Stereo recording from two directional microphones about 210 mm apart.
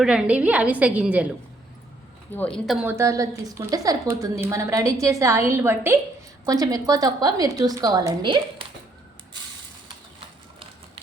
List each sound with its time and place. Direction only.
0.0 s a woman's voice: 5° right (ahead or behind)
2.3 s a woman's voice: 5° left (ahead or behind)
2.8 s a woman's voice: 15° right (ahead or behind)